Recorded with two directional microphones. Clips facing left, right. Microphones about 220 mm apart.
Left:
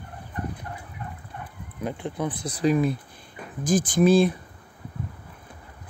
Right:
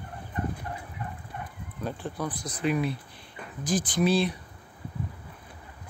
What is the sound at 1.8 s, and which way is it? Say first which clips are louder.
Speech: left 4 dB; 15° left (ahead or behind).